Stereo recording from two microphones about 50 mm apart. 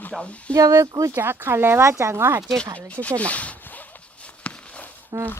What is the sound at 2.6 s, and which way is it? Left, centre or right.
Speech, left.